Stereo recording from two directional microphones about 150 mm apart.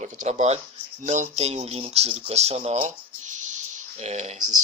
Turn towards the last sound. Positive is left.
turn(degrees=-50)  # may be behind; listen again after turning